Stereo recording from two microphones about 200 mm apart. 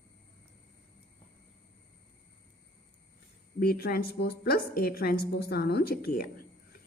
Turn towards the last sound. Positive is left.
turn(degrees=45)  # may be behind; listen again after turning